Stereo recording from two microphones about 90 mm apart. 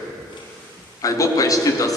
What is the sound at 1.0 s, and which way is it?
Speech, 40° left (ahead or behind).